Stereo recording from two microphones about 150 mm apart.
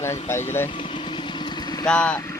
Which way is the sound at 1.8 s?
5° left (ahead or behind).